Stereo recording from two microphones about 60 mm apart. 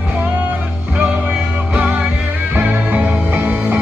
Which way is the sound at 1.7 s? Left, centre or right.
Centre.